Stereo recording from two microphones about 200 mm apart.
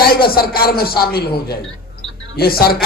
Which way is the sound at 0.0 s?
50° left (ahead or behind).